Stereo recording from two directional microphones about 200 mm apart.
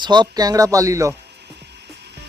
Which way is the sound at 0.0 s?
20° right (ahead or behind).